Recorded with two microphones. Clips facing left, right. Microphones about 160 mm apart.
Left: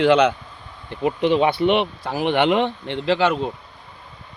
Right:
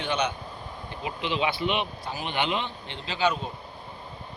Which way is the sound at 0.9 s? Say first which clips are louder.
Left 12 dB; 55° left (ahead or behind).